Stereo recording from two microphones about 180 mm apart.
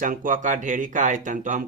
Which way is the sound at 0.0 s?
50° right (ahead or behind).